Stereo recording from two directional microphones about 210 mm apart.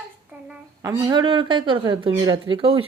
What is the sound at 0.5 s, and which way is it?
A woman's voice, 15° right (ahead or behind).